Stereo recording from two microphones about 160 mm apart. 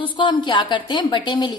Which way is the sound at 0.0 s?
30° left (ahead or behind).